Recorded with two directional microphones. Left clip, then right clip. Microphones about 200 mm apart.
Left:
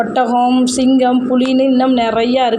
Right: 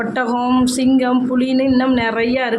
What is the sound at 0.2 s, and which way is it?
A woman's voice, 5° left (ahead or behind).